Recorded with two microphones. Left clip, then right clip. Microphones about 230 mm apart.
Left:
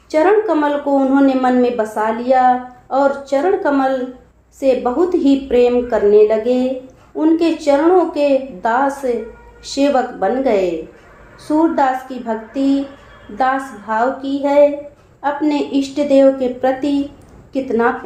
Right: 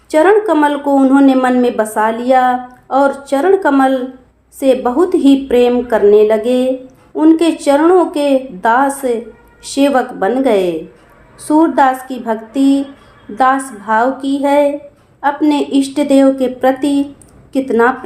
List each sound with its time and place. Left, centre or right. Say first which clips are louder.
0.1 s a woman's voice: right 3 dB; right